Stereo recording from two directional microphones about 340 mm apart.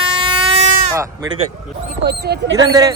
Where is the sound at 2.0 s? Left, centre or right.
Right.